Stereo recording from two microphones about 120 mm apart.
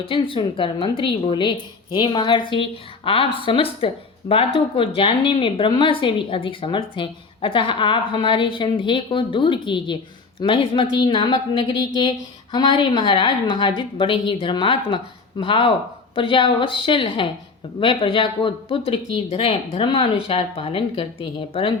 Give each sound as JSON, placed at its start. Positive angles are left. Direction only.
{"t": 0.0, "sound": "a woman's voice", "side_deg": 45}